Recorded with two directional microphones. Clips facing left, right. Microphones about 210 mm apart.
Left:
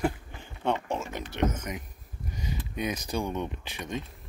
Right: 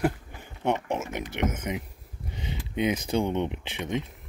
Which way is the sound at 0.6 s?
15° right (ahead or behind).